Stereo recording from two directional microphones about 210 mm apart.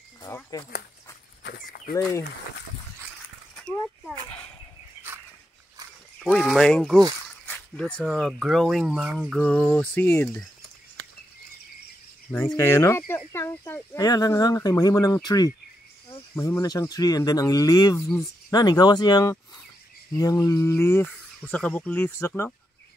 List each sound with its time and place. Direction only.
0.2 s a sound: 15° left (ahead or behind)
1.4 s livestock: 50° left (ahead or behind)
2.0 s speech: 15° left (ahead or behind)
3.5 s a sound: 5° left (ahead or behind)
6.2 s speech: centre (ahead or behind)
12.3 s speech: 10° left (ahead or behind)
17.9 s speech: 5° left (ahead or behind)
18.5 s speech: 20° left (ahead or behind)